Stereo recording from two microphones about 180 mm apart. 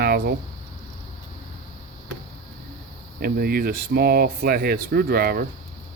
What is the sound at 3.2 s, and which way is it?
Speech, 60° right (ahead or behind).